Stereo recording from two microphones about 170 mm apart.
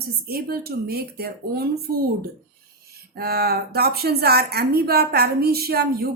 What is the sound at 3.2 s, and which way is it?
A woman's voice, 65° right (ahead or behind).